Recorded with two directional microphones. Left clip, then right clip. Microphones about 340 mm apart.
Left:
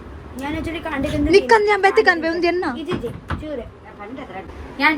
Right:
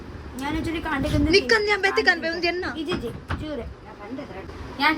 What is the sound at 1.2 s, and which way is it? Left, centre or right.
A woman's voice, centre.